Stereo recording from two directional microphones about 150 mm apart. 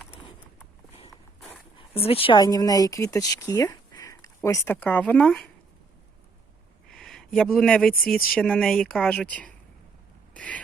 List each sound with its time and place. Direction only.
1.9 s speech: 40° left (ahead or behind); by 5.5 s 5° left (ahead or behind)
6.9 s speech: 5° left (ahead or behind)
10.3 s a sound: 10° left (ahead or behind)